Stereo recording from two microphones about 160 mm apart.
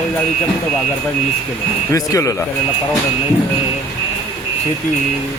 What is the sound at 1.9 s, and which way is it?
Speech, 20° left (ahead or behind).